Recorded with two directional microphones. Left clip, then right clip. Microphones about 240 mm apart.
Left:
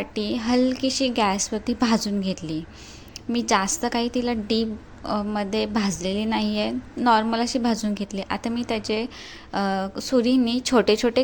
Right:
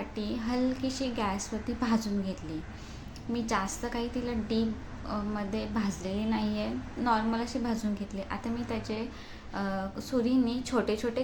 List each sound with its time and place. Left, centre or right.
0.1 s a woman's voice: left